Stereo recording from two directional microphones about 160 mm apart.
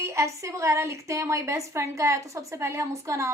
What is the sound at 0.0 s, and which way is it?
A woman's voice, 20° right (ahead or behind).